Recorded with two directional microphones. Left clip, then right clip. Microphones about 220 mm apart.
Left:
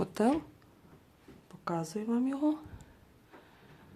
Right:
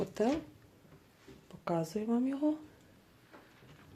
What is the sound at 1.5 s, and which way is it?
Speech, centre (ahead or behind).